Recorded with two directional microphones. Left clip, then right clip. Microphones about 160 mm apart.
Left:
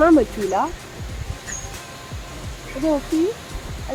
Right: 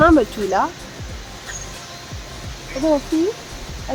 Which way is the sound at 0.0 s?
30° right (ahead or behind).